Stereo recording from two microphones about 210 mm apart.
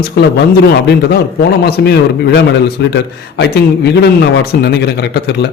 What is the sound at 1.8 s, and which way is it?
A man's voice, 55° left (ahead or behind).